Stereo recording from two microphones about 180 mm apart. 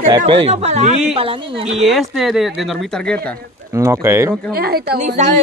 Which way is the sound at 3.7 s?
15° right (ahead or behind).